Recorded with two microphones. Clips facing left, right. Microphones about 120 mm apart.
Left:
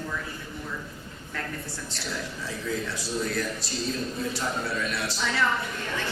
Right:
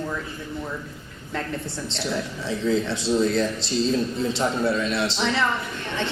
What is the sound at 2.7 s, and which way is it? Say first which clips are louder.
Speech: right 9 dB; 25° right (ahead or behind).